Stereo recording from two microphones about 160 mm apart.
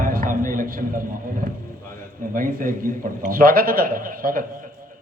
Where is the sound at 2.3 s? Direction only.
60° right (ahead or behind).